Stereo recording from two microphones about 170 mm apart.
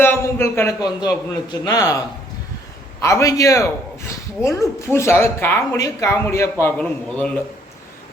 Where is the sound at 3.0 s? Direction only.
20° left (ahead or behind).